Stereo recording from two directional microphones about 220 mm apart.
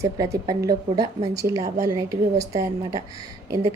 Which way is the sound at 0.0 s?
15° right (ahead or behind).